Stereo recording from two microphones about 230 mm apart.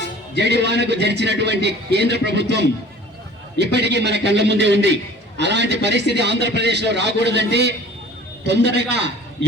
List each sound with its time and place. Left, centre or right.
0.4 s a man's voice: right